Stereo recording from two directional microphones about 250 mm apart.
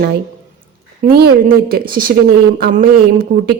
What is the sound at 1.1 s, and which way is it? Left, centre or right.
Speech, right.